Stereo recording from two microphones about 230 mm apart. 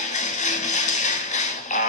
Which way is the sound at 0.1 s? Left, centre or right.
Left.